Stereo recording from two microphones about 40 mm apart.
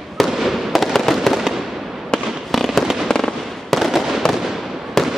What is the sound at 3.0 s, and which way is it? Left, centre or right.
Fireworks, centre.